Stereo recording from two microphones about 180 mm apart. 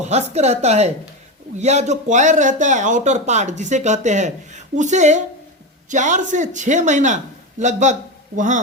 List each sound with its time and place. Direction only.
0.0 s speech: 40° right (ahead or behind)